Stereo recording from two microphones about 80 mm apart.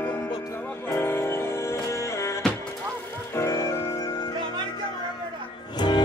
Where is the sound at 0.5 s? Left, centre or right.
Left.